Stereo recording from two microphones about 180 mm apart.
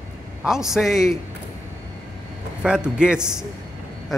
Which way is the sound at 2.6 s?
5° right (ahead or behind).